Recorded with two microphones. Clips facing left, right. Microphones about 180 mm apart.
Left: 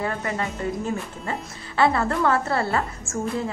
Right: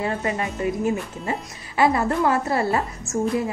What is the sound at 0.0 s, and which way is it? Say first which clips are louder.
A woman's voice: right 2 dB; 20° right (ahead or behind).